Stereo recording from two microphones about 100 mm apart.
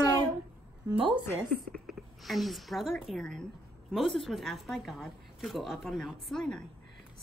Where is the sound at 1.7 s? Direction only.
Centre (ahead or behind).